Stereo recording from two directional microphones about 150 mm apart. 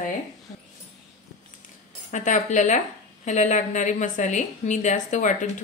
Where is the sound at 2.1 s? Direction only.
55° left (ahead or behind).